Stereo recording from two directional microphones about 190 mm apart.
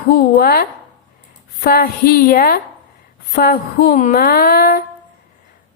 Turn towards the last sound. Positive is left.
turn(degrees=50)  # may be behind; listen again after turning